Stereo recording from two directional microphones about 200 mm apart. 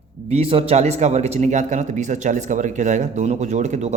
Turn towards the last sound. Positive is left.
turn(degrees=-35)  # may be behind; listen again after turning